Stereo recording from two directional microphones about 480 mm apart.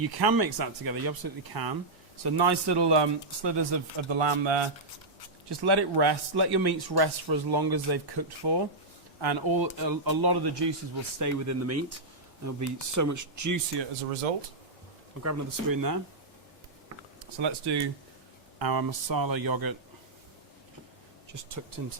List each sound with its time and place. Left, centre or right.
0.0 s speech: right
5.5 s speech: right
11.2 s speech: right
15.2 s speech: right
17.4 s speech: right
21.3 s speech: right